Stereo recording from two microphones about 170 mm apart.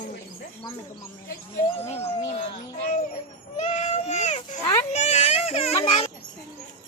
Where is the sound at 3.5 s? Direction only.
45° left (ahead or behind).